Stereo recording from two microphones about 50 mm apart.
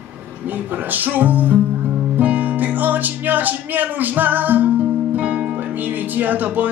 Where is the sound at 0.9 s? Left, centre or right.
Right.